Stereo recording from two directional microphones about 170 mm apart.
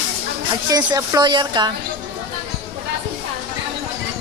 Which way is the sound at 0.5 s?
25° right (ahead or behind).